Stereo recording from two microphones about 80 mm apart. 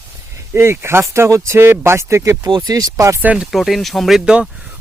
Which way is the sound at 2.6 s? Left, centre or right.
Right.